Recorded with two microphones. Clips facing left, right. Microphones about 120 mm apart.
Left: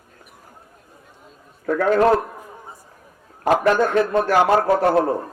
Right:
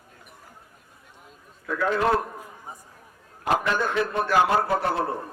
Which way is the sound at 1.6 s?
50° left (ahead or behind).